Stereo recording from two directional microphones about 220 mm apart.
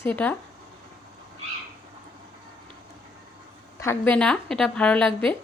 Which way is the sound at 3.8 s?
10° left (ahead or behind).